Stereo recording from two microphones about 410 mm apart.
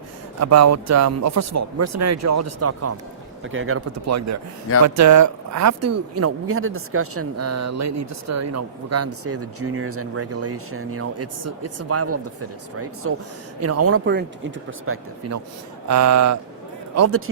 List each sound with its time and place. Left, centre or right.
0.3 s speech: right